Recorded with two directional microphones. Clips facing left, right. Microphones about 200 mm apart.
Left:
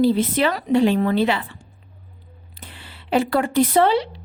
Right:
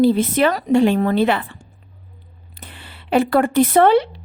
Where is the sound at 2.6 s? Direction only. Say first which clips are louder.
Right 2 dB; 55° right (ahead or behind).